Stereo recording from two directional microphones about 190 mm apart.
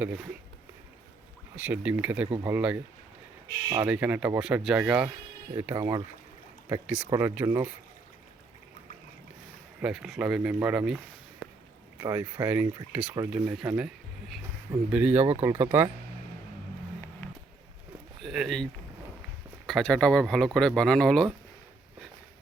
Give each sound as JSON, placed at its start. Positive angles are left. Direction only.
{"t": 0.0, "sound": "speech", "side_deg": -10}
{"t": 1.5, "sound": "speech", "side_deg": -10}
{"t": 5.6, "sound": "speech", "side_deg": -20}
{"t": 9.8, "sound": "speech", "side_deg": -5}
{"t": 15.2, "sound": "speech", "side_deg": -35}
{"t": 15.4, "sound": "speech", "side_deg": -10}
{"t": 18.2, "sound": "speech", "side_deg": 0}